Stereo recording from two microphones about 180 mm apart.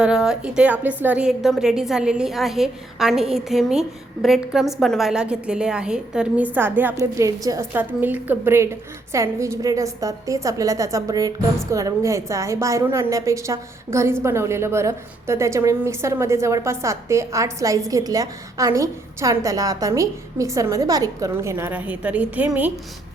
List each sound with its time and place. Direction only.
0.0 s a woman's voice: 5° right (ahead or behind)